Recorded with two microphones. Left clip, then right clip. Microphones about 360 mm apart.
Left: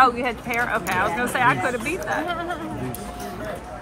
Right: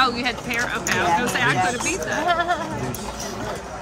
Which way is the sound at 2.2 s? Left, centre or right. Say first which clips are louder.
Right 7 dB; right.